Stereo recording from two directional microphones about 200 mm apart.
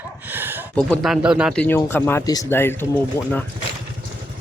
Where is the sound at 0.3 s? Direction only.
10° right (ahead or behind).